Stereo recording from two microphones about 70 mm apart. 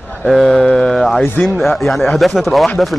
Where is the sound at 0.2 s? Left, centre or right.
Centre.